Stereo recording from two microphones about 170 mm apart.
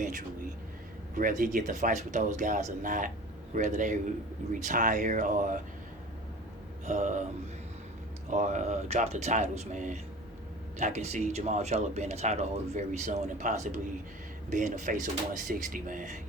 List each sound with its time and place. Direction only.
0.0 s speech: 50° right (ahead or behind)
6.8 s speech: 45° right (ahead or behind)
8.3 s a man's voice: 45° right (ahead or behind)